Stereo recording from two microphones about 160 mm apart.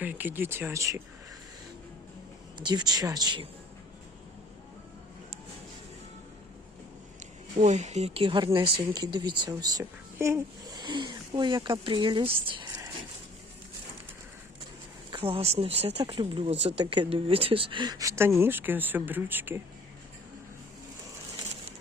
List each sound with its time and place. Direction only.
0.0 s speech: 10° right (ahead or behind)
2.6 s speech: 25° right (ahead or behind)
7.6 s speech: 45° right (ahead or behind)
15.1 s speech: 35° right (ahead or behind); by 19.6 s 10° right (ahead or behind)